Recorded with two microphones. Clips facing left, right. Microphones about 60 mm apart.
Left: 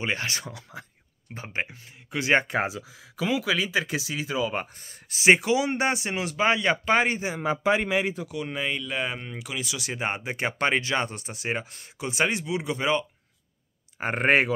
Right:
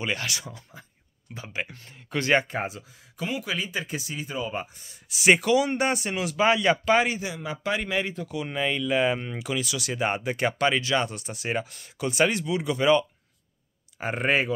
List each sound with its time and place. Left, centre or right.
0.0 s speech: left
0.5 s speech: left
1.3 s speech: left
1.7 s speech: centre
2.4 s speech: left
3.5 s speech: left
4.6 s speech: left
5.2 s speech: left
7.6 s speech: left
8.1 s speech: centre
9.6 s speech: left
13.9 s speech: left